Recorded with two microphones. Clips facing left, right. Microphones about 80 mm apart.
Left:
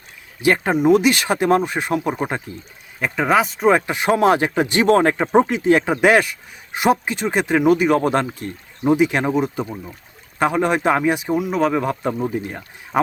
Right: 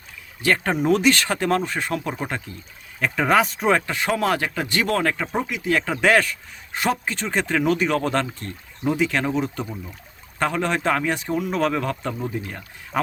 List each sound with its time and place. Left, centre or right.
0.4 s speech: centre
3.0 s speech: centre
3.7 s speech: centre